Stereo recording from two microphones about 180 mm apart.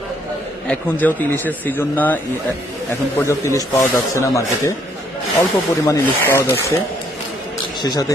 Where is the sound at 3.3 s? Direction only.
15° left (ahead or behind).